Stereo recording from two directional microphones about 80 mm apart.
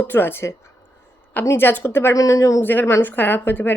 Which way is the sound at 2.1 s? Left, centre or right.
Left.